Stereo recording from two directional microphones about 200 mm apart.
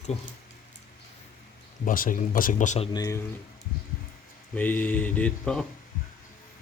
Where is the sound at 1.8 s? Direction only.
45° left (ahead or behind).